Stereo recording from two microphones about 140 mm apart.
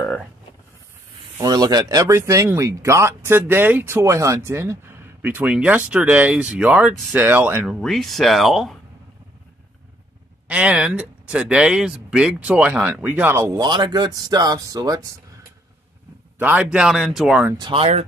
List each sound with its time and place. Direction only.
1.4 s speech: 25° right (ahead or behind); by 7.7 s 10° right (ahead or behind)
7.8 s speech: centre (ahead or behind)
10.5 s speech: 10° right (ahead or behind); by 15.0 s 25° right (ahead or behind)
16.3 s speech: 10° right (ahead or behind)
17.6 s speech: 40° right (ahead or behind)